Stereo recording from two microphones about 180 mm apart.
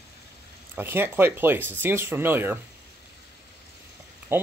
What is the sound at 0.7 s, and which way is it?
Speech, 10° right (ahead or behind).